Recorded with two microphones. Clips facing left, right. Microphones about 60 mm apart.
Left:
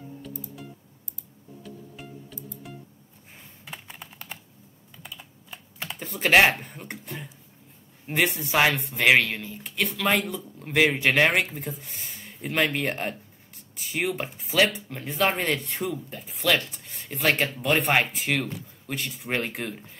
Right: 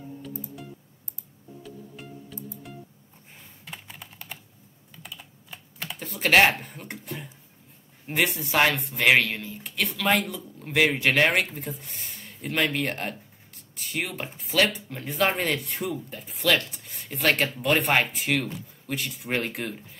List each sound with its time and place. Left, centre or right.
1.6 s music: centre
3.6 s computer keyboard: centre
5.9 s speech: centre